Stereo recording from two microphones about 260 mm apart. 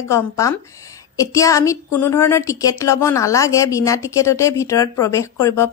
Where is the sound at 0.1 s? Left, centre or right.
Centre.